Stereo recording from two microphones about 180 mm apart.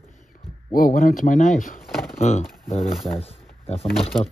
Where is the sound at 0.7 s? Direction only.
50° left (ahead or behind); by 4.1 s 35° left (ahead or behind).